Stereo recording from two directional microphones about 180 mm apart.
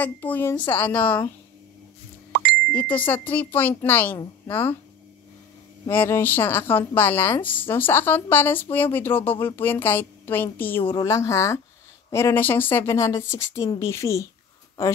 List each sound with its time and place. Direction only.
0.0 s speech: 10° left (ahead or behind)
2.7 s speech: 10° left (ahead or behind)
5.9 s speech: 10° left (ahead or behind)